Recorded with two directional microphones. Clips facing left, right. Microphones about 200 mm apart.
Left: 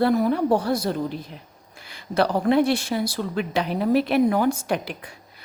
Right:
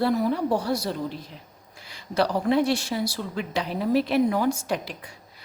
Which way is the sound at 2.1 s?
55° left (ahead or behind).